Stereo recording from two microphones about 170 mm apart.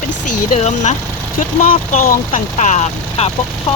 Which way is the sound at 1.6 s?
55° left (ahead or behind).